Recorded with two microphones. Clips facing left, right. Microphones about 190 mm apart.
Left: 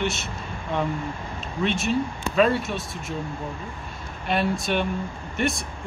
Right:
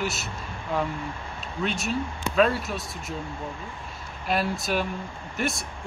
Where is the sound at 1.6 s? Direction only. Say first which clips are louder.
Left 4 dB; centre (ahead or behind).